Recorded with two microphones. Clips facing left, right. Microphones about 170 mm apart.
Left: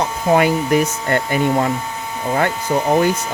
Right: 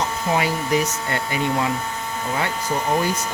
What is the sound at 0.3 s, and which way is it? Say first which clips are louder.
Speech: left 7 dB; 55° left (ahead or behind).